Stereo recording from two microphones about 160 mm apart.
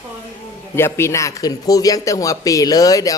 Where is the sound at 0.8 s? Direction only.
15° left (ahead or behind).